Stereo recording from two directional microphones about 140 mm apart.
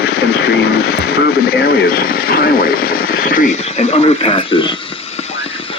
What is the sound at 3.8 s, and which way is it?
Speech, 50° left (ahead or behind).